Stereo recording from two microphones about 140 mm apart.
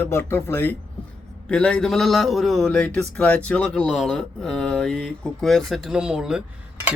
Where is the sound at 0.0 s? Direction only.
15° left (ahead or behind).